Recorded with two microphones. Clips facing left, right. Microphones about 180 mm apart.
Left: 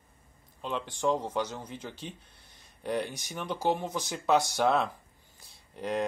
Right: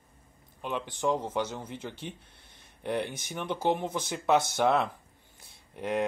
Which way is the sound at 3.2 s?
20° right (ahead or behind).